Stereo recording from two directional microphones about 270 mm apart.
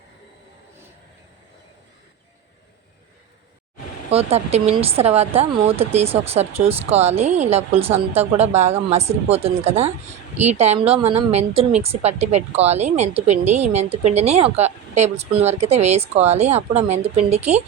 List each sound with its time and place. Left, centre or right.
4.1 s speech: right